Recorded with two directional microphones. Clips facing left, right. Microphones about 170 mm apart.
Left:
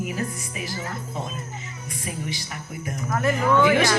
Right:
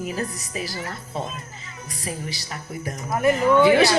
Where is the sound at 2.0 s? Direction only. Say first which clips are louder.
Even; 35° right (ahead or behind).